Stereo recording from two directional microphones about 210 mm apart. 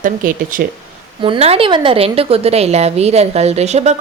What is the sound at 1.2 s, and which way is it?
A woman's voice, 25° right (ahead or behind).